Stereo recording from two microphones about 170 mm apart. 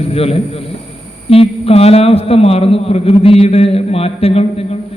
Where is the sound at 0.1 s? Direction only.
35° left (ahead or behind).